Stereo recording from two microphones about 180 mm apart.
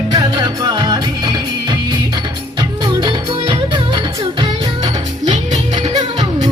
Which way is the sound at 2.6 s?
25° right (ahead or behind).